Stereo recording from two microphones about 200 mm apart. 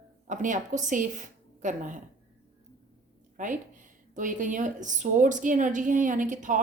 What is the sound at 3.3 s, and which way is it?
A woman's voice, 40° right (ahead or behind).